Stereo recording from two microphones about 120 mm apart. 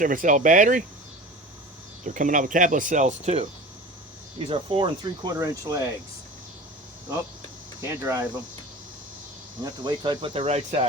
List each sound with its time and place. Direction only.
0.0 s speech: 90° right
2.0 s speech: 90° right; by 3.5 s 70° right (ahead or behind)
4.4 s speech: 45° right (ahead or behind); by 5.9 s 25° right (ahead or behind)
7.8 s speech: 25° right (ahead or behind)
9.6 s speech: 40° right (ahead or behind); by 10.8 s 65° right (ahead or behind)